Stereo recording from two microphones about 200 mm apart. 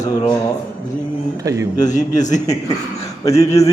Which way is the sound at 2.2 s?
35° left (ahead or behind).